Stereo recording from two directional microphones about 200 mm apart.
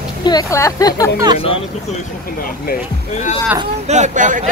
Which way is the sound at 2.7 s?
35° left (ahead or behind).